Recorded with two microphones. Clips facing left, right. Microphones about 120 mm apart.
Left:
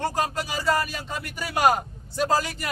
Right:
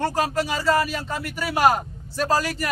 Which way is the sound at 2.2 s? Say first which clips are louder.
Right 1 dB; 20° left (ahead or behind).